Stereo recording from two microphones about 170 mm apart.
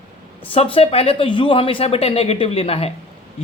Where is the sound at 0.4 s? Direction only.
35° left (ahead or behind).